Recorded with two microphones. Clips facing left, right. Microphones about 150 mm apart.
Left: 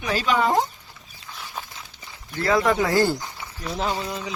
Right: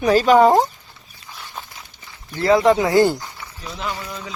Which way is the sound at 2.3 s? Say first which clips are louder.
Right 6 dB; 25° right (ahead or behind).